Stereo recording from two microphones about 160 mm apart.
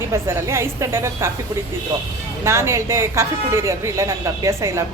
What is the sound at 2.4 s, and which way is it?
Speech, 15° right (ahead or behind).